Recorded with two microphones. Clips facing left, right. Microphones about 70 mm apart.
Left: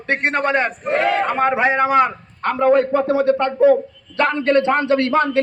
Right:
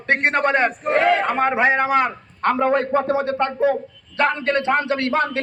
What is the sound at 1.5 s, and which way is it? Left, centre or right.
Speech, centre.